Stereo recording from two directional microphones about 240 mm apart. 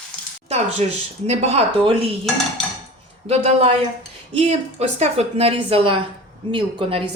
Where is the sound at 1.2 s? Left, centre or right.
Right.